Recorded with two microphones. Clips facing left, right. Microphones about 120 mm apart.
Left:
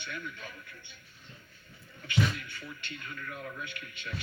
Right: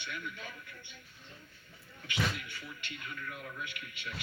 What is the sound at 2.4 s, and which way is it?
A man's voice, 40° left (ahead or behind).